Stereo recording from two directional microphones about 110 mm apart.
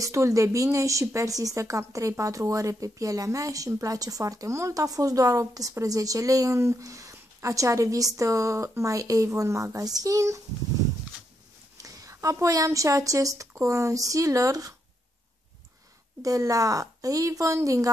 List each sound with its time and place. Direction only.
0.0 s speech: 30° right (ahead or behind)
11.8 s a woman's voice: 30° right (ahead or behind)
16.2 s a woman's voice: 30° right (ahead or behind)